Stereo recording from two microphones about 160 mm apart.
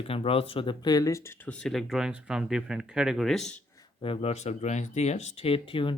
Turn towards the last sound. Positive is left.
turn(degrees=30)  # may be behind; listen again after turning